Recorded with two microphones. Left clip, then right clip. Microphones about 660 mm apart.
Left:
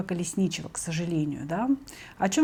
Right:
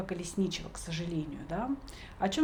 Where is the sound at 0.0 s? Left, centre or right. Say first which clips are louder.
Left 4 dB; left.